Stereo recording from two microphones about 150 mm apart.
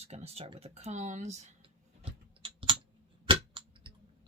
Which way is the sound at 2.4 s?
35° right (ahead or behind).